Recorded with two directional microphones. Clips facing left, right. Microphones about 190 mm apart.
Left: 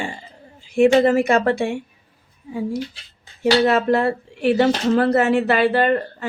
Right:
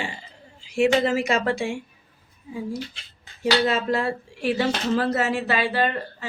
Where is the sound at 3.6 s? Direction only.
60° left (ahead or behind).